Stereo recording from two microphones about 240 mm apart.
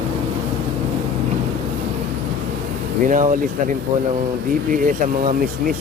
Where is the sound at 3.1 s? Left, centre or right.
Right.